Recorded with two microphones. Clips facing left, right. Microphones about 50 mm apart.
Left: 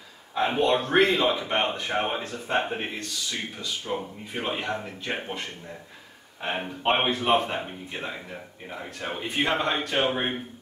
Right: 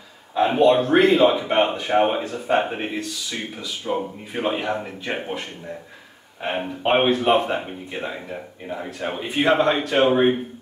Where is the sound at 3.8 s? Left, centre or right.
Right.